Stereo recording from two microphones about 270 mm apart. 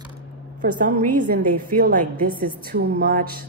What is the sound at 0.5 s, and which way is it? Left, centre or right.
A woman's voice, right.